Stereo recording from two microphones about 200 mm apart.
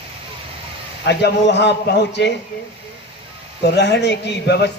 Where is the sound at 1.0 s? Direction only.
60° left (ahead or behind).